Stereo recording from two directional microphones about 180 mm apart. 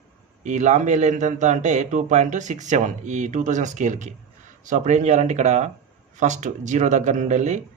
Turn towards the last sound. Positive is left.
turn(degrees=-40)  # may be behind; listen again after turning